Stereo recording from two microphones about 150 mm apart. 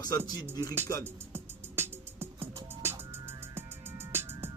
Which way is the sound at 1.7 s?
15° right (ahead or behind).